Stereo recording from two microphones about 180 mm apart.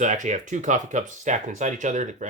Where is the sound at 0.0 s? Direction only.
45° right (ahead or behind).